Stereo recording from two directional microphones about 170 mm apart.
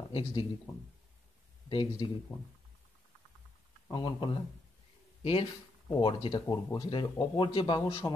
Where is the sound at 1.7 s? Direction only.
30° left (ahead or behind).